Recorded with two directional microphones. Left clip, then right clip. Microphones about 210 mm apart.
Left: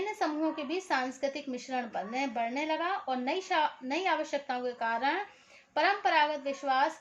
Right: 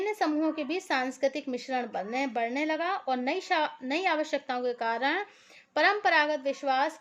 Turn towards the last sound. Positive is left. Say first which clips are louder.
# right 1 dB
turn(degrees=-50)  # may be behind; listen again after turning